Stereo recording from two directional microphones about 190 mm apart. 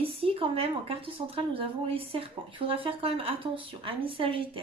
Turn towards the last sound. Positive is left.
turn(degrees=-30)  # may be behind; listen again after turning